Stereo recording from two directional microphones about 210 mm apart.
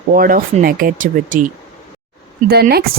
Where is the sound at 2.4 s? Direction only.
50° right (ahead or behind).